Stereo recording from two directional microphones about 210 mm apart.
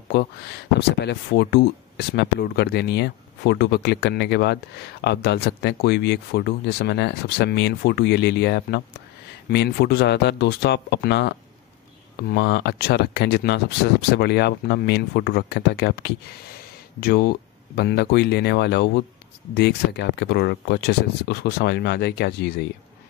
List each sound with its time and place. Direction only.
0.1 s speech: 50° left (ahead or behind)